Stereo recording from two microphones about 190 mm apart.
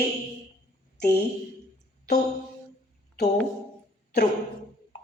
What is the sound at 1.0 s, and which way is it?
Speech, 60° left (ahead or behind).